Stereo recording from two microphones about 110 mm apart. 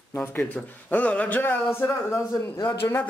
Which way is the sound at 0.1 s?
20° left (ahead or behind).